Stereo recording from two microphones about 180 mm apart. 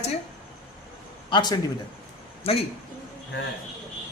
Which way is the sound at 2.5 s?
35° left (ahead or behind).